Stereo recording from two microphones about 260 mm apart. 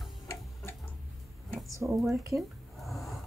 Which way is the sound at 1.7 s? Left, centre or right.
Centre.